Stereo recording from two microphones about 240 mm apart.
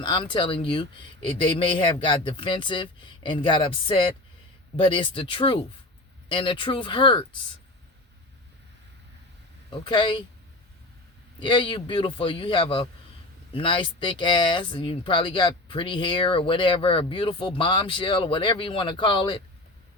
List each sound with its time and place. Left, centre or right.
0.0 s speech: centre
9.6 s speech: centre
11.3 s speech: centre